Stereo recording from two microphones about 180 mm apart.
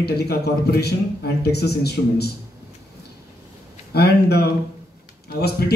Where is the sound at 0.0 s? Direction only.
60° left (ahead or behind).